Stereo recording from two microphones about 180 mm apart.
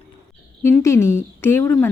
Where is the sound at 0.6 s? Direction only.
15° left (ahead or behind).